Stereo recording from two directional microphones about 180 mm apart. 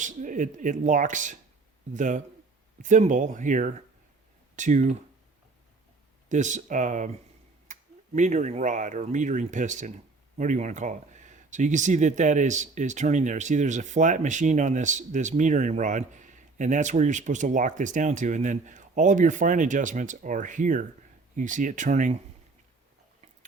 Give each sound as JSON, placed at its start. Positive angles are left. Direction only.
{"t": 0.0, "sound": "speech", "side_deg": -45}
{"t": 6.2, "sound": "speech", "side_deg": -40}